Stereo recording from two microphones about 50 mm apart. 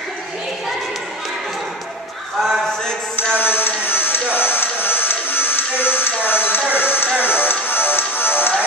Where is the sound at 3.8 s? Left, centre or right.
Left.